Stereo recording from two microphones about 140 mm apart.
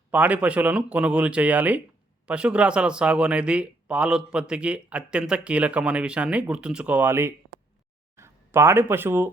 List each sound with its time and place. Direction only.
0.1 s speech: 10° right (ahead or behind)